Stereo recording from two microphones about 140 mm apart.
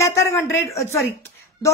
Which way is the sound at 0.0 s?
20° left (ahead or behind).